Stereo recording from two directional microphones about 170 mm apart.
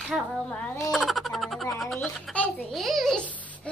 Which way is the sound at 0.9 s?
Centre (ahead or behind).